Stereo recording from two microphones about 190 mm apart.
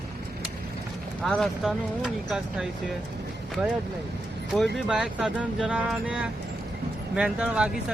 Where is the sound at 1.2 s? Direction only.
Centre (ahead or behind).